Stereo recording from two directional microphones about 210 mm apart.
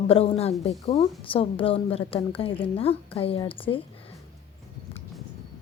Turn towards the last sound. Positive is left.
turn(degrees=25)  # may be behind; listen again after turning